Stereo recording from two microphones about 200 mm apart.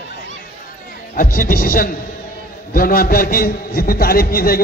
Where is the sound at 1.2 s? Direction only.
45° left (ahead or behind).